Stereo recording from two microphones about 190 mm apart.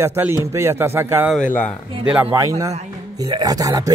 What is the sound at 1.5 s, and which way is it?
Speech, 5° left (ahead or behind).